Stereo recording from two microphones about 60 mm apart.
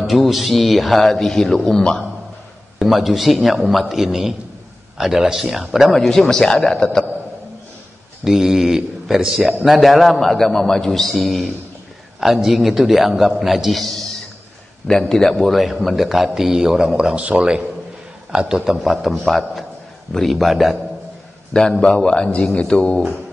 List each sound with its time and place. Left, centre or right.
0.0 s a man's voice: centre
2.8 s a man's voice: centre
5.9 s a man's voice: centre
8.2 s a man's voice: centre
17.1 s a man's voice: right; by 20.7 s centre
21.5 s a man's voice: centre